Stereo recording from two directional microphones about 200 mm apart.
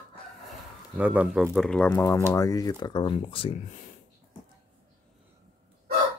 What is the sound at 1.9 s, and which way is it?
Speech, 15° left (ahead or behind).